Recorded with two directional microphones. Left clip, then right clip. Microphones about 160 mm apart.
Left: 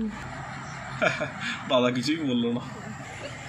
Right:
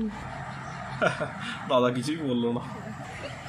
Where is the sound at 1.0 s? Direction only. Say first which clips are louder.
Left 1 dB; 25° right (ahead or behind).